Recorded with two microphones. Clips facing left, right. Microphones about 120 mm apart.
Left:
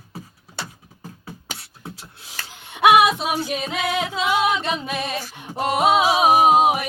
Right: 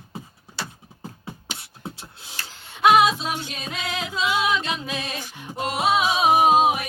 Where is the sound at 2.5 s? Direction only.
15° left (ahead or behind).